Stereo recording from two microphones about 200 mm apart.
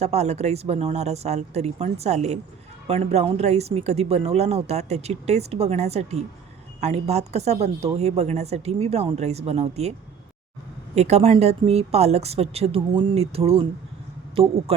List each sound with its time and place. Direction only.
0.0 s speech: 35° right (ahead or behind)
10.9 s speech: 35° right (ahead or behind)